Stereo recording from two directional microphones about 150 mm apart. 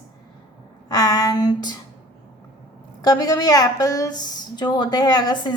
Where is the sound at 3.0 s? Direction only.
25° left (ahead or behind).